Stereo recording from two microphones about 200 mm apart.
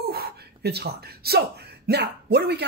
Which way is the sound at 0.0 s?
50° right (ahead or behind).